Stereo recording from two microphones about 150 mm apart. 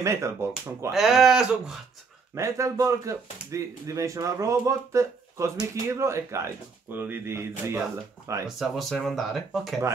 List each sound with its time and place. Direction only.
0.0 s speech: 20° right (ahead or behind)
0.9 s speech: 5° right (ahead or behind)
2.3 s speech: 20° right (ahead or behind)
8.5 s speech: centre (ahead or behind)